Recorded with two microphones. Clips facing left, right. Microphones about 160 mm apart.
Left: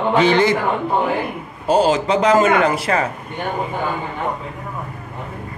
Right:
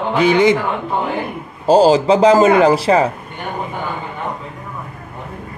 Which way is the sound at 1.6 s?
35° right (ahead or behind).